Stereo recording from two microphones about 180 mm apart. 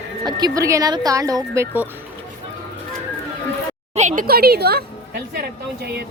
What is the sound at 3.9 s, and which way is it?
Speech, 45° right (ahead or behind).